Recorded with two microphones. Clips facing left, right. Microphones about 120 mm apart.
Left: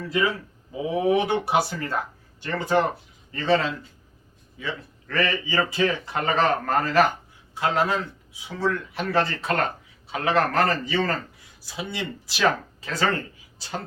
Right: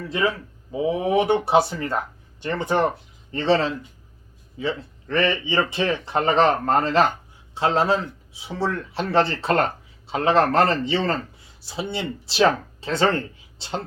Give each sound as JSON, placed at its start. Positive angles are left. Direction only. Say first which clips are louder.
{"t": 0.7, "sound": "speech", "louder": "right 1 dB", "side_deg": -25}